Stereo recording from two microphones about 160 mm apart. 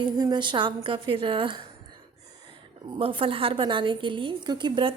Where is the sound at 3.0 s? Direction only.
35° right (ahead or behind).